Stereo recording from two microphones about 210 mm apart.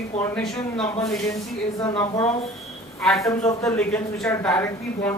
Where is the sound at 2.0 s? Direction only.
15° left (ahead or behind).